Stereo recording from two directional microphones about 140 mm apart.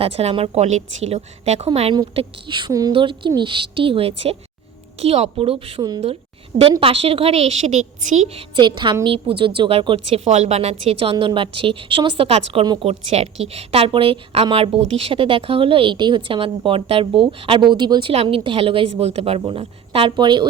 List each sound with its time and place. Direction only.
0.0 s a woman's voice: 45° right (ahead or behind)
2.1 s a woman's voice: 35° right (ahead or behind); by 8.4 s 50° right (ahead or behind)
8.5 s a woman's voice: 35° right (ahead or behind)
18.1 s a woman's voice: 45° right (ahead or behind)